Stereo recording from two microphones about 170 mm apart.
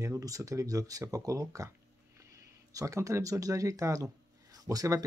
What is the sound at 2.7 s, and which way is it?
Speech, 20° right (ahead or behind).